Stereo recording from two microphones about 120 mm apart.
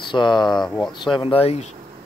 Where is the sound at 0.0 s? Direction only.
40° left (ahead or behind); by 1.8 s 60° left (ahead or behind).